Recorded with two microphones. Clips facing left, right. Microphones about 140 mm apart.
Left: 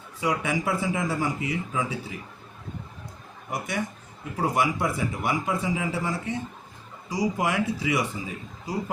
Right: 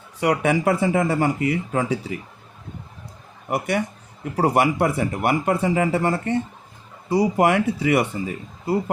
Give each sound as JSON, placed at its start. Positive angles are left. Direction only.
{"t": 0.2, "sound": "speech", "side_deg": -65}
{"t": 3.5, "sound": "speech", "side_deg": -65}